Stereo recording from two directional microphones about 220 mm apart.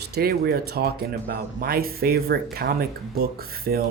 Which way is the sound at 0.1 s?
45° right (ahead or behind).